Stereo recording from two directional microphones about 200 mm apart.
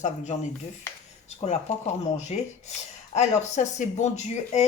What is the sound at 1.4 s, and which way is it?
Speech, 35° left (ahead or behind).